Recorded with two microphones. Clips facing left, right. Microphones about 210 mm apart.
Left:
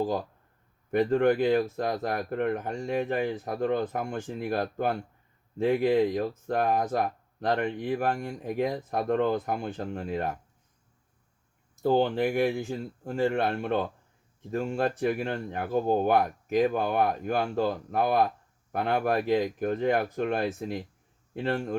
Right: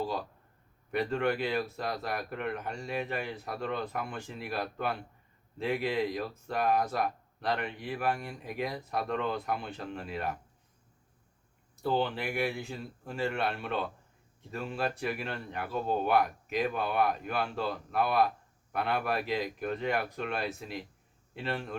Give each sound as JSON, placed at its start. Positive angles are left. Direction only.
{"t": 0.9, "sound": "speech", "side_deg": 45}
{"t": 11.8, "sound": "speech", "side_deg": 45}